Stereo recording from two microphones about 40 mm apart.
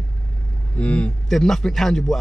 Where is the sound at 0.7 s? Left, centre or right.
Left.